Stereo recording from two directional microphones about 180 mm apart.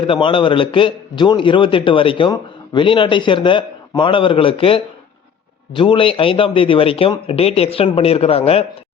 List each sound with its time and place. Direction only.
0.0 s a man's voice: 30° left (ahead or behind)